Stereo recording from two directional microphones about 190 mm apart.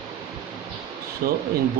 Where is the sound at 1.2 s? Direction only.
55° right (ahead or behind).